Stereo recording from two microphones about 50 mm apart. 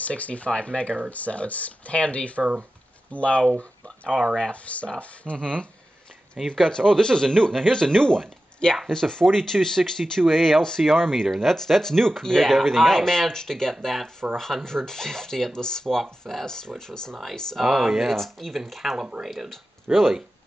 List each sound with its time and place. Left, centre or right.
0.0 s speech: left; by 17.2 s centre
17.6 s speech: centre